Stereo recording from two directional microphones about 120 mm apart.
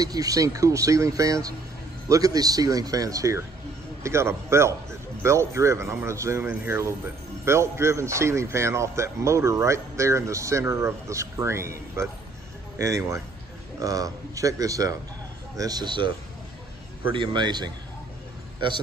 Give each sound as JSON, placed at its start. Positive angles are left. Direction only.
{"t": 0.0, "sound": "speech", "side_deg": -30}
{"t": 12.7, "sound": "a man's voice", "side_deg": -25}
{"t": 17.1, "sound": "a man's voice", "side_deg": -40}